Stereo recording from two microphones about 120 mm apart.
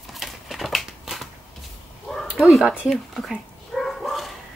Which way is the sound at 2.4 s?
5° right (ahead or behind).